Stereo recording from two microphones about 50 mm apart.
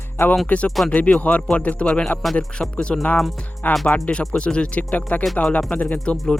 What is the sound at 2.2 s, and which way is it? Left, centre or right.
Speech, centre.